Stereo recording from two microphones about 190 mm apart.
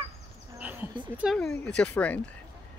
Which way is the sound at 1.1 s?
5° right (ahead or behind).